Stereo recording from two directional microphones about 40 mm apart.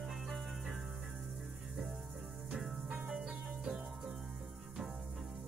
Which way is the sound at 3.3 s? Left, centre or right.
Right.